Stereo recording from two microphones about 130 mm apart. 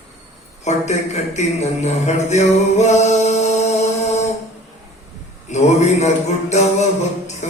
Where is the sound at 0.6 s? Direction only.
60° left (ahead or behind).